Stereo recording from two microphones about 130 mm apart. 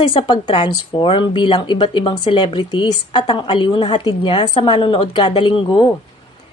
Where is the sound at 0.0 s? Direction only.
40° left (ahead or behind).